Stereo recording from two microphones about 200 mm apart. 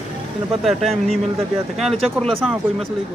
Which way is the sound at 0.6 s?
Centre (ahead or behind).